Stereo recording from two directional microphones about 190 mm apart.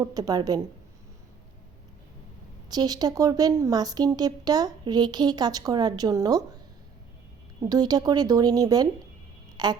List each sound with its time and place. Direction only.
0.0 s speech: 20° right (ahead or behind)
2.6 s speech: 20° right (ahead or behind)
7.6 s speech: 20° right (ahead or behind)